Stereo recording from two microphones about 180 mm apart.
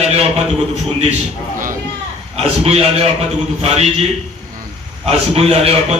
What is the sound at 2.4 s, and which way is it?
Speech, 35° right (ahead or behind).